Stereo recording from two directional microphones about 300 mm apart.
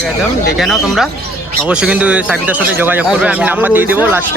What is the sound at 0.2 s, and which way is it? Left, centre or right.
Speech, centre.